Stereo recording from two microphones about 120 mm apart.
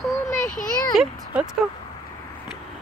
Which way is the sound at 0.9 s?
5° right (ahead or behind).